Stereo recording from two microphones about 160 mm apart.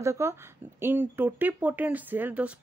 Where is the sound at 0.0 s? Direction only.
15° right (ahead or behind).